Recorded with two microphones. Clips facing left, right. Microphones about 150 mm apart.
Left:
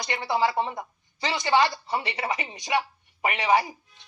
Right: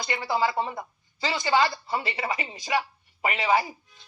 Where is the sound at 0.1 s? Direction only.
20° left (ahead or behind).